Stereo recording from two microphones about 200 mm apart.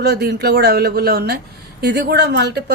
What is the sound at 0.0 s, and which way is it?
Speech, 55° right (ahead or behind).